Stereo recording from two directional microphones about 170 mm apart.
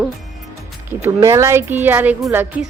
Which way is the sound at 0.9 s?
15° right (ahead or behind).